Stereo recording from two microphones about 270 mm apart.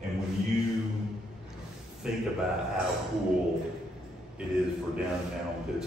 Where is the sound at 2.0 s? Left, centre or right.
Centre.